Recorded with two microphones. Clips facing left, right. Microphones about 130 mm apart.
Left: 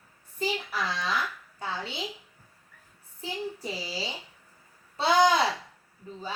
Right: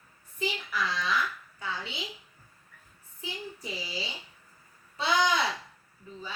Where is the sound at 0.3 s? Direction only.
35° left (ahead or behind).